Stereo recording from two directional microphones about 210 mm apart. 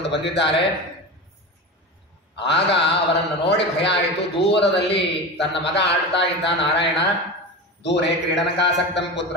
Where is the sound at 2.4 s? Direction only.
55° left (ahead or behind).